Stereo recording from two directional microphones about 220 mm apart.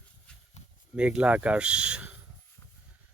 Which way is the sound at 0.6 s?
30° left (ahead or behind).